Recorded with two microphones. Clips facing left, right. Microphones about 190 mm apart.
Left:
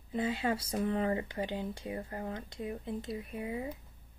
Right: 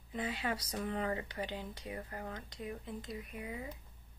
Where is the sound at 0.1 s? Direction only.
25° left (ahead or behind).